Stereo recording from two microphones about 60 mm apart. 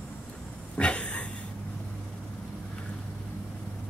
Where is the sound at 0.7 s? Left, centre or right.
Centre.